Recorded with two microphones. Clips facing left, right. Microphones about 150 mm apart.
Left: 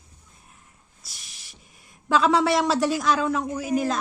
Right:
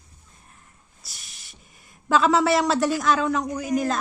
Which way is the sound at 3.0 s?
Centre (ahead or behind).